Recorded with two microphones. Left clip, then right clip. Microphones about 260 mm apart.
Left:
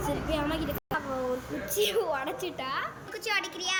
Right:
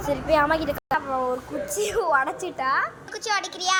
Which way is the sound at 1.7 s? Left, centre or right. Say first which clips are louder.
Right 6 dB; centre.